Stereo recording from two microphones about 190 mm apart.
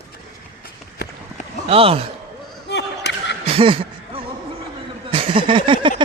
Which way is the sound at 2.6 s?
65° left (ahead or behind).